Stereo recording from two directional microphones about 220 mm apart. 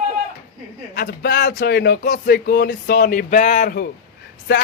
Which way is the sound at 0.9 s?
45° left (ahead or behind).